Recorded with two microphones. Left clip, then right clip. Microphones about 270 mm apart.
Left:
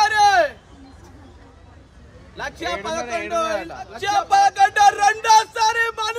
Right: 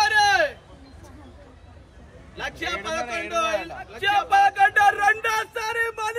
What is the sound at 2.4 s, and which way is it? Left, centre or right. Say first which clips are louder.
A man's voice: left 2 dB; centre.